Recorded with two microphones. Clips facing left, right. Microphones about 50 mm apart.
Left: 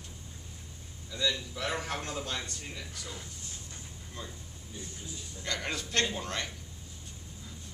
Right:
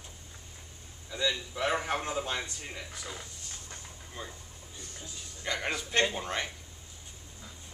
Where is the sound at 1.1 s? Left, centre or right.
Right.